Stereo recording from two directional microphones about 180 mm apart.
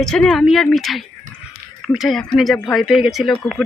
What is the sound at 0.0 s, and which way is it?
A woman's voice, 5° left (ahead or behind).